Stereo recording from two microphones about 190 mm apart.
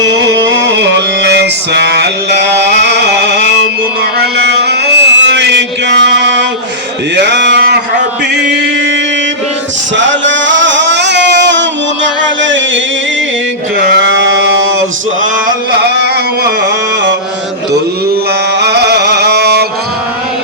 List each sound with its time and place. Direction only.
0.1 s music: 75° right (ahead or behind)
4.2 s mantra: 60° right (ahead or behind)
7.2 s a sound: 65° right (ahead or behind)
10.0 s music: 70° right (ahead or behind)
13.7 s a sound: 75° right (ahead or behind)
18.6 s music: 60° right (ahead or behind)